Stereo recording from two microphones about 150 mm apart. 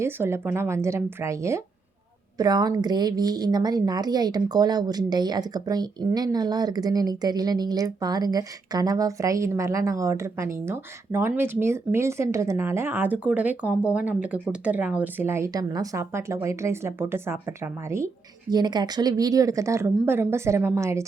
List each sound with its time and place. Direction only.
0.0 s speech: 15° right (ahead or behind)